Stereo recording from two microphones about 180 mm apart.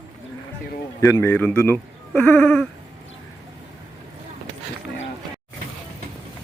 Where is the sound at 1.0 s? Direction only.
15° left (ahead or behind).